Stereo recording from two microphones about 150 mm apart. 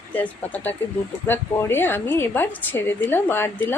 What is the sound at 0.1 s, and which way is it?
A woman's voice, 10° left (ahead or behind).